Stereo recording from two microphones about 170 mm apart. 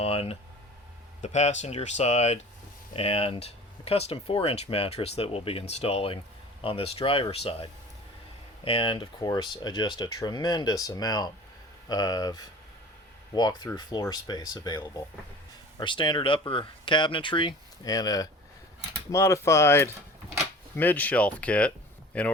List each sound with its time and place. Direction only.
0.0 s speech: 35° left (ahead or behind); by 22.3 s 5° left (ahead or behind)